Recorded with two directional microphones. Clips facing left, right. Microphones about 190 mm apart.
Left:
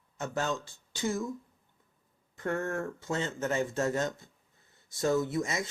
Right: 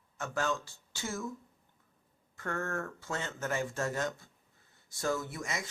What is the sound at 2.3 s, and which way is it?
Speech, 20° left (ahead or behind).